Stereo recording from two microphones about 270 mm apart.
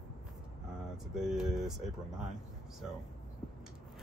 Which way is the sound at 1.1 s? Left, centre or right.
Centre.